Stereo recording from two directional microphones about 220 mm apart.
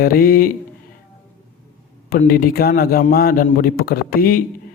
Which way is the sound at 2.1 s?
40° left (ahead or behind).